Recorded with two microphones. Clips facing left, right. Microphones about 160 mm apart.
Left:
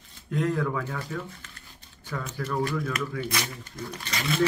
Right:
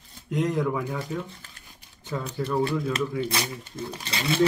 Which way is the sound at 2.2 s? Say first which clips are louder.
Right 3 dB; 30° right (ahead or behind).